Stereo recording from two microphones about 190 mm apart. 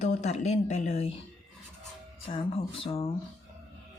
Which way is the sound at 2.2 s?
30° left (ahead or behind).